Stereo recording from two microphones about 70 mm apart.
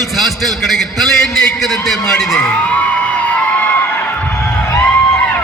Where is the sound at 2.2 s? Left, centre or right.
Centre.